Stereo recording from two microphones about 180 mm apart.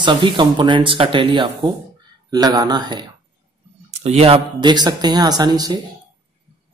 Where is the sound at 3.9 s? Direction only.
35° right (ahead or behind).